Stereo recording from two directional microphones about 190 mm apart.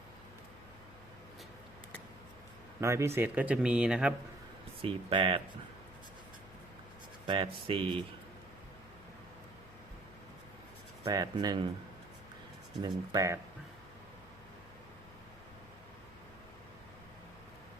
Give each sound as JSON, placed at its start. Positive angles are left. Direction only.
{"t": 2.8, "sound": "speech", "side_deg": -15}
{"t": 4.8, "sound": "speech", "side_deg": -30}
{"t": 7.3, "sound": "speech", "side_deg": -30}
{"t": 11.0, "sound": "speech", "side_deg": -20}
{"t": 12.8, "sound": "speech", "side_deg": -20}